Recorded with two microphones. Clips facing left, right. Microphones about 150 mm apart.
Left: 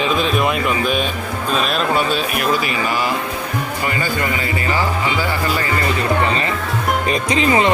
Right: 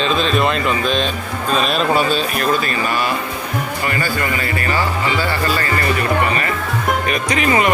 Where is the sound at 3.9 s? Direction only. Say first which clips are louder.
Even; 20° left (ahead or behind).